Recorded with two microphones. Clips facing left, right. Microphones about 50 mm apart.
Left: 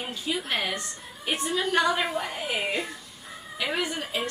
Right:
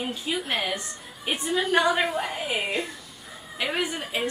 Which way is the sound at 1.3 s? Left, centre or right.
Centre.